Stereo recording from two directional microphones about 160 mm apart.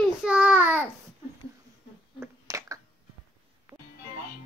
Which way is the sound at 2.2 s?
20° right (ahead or behind).